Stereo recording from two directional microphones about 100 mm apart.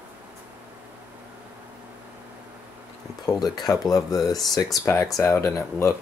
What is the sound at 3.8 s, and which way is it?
Speech, 40° left (ahead or behind).